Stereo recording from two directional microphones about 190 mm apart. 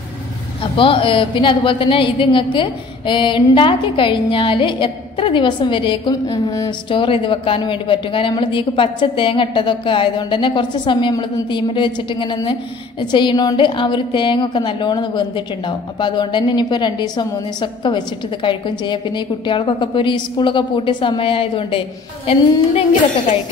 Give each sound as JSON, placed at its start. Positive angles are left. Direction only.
{"t": 0.7, "sound": "a woman's voice", "side_deg": 25}